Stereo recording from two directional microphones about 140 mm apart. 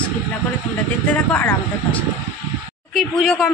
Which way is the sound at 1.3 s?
15° left (ahead or behind).